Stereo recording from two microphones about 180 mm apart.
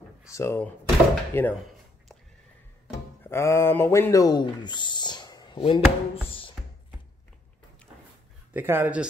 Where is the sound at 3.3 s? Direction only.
15° left (ahead or behind).